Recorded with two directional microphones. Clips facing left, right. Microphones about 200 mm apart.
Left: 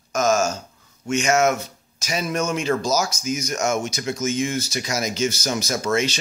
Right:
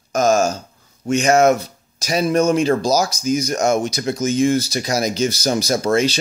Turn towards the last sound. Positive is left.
turn(degrees=-35)  # may be behind; listen again after turning